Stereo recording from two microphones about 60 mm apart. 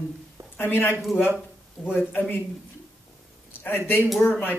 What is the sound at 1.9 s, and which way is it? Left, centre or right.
Speech, left.